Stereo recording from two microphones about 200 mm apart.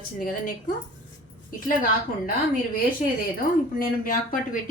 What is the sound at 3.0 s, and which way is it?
A woman's voice, 40° left (ahead or behind).